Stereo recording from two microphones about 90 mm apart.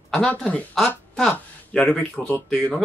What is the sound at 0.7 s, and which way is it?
Speech, 5° left (ahead or behind).